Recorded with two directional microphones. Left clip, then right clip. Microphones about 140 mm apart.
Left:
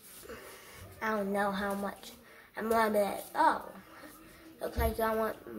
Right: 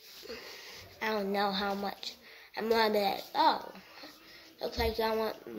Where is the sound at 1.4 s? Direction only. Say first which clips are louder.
Right 1 dB; 5° right (ahead or behind).